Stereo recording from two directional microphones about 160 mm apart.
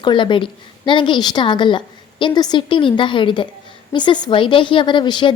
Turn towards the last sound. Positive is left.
turn(degrees=30)  # may be behind; listen again after turning